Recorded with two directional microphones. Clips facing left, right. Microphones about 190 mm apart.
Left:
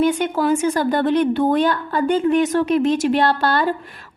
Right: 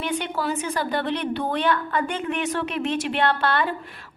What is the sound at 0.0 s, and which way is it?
A woman's voice, 45° left (ahead or behind).